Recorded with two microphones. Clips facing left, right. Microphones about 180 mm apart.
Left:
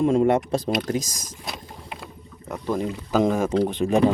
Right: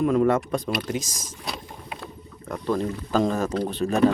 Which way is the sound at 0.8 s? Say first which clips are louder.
Left 3 dB; 45° left (ahead or behind).